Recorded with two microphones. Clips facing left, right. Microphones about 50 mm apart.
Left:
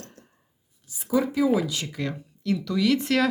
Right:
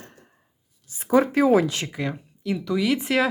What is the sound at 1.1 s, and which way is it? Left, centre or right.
Speech, right.